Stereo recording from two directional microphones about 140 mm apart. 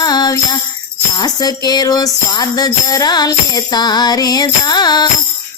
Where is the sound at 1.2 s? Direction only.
30° left (ahead or behind).